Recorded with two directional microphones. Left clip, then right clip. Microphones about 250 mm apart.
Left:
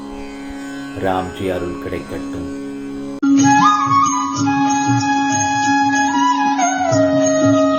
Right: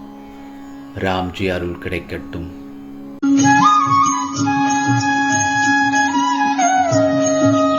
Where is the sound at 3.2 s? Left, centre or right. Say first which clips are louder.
Even; centre.